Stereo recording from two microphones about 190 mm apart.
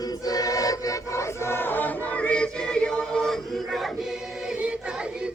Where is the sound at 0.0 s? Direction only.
20° left (ahead or behind).